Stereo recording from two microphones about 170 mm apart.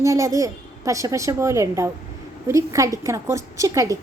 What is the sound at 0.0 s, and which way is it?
A woman's voice, 20° right (ahead or behind).